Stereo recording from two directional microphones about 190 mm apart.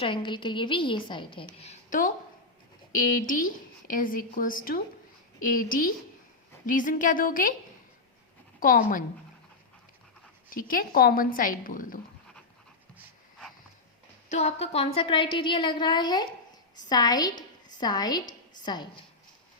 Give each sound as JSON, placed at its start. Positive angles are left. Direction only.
{"t": 0.0, "sound": "a woman's voice", "side_deg": 25}
{"t": 3.2, "sound": "speech", "side_deg": 45}
{"t": 8.6, "sound": "speech", "side_deg": 45}
{"t": 10.5, "sound": "speech", "side_deg": 45}
{"t": 14.3, "sound": "a woman's voice", "side_deg": 35}